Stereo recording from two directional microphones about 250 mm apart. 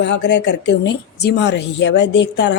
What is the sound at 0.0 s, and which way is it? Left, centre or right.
A woman's voice, left.